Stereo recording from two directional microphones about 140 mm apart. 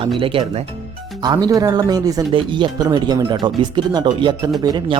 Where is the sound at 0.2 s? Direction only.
40° right (ahead or behind).